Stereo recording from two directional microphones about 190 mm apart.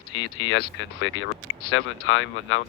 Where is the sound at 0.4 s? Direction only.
85° left.